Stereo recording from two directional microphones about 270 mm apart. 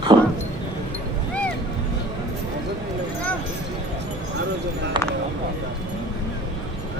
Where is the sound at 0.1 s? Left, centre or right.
Centre.